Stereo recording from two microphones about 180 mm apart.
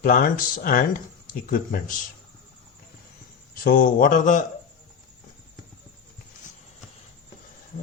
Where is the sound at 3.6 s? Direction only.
50° left (ahead or behind).